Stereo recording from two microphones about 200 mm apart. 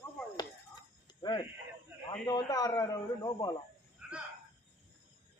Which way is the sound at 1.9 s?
15° right (ahead or behind).